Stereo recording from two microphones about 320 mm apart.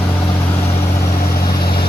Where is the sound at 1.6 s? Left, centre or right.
Left.